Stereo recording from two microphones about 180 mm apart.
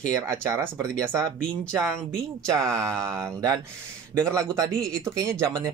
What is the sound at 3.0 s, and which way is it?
Speech, 15° right (ahead or behind).